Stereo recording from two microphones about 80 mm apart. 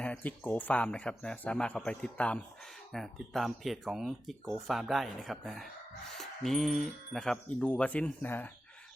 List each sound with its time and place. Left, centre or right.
0.0 s speech: centre
2.9 s speech: centre; by 8.5 s left